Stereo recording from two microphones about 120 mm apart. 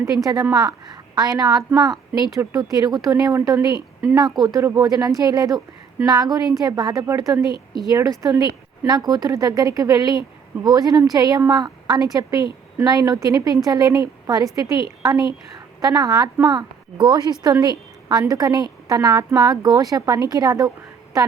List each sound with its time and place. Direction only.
0.3 s a woman's voice: 30° right (ahead or behind)